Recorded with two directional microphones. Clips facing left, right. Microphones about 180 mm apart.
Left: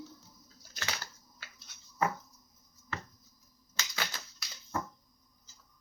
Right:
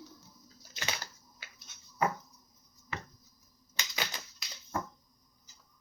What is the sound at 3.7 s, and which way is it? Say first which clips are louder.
Typewriter: right 1 dB; 20° right (ahead or behind).